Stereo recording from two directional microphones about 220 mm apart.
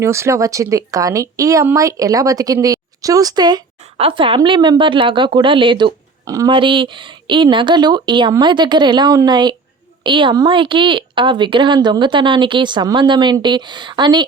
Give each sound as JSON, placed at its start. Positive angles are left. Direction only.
{"t": 0.0, "sound": "speech", "side_deg": -10}